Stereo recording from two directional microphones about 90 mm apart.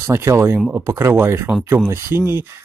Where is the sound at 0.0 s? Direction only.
30° right (ahead or behind).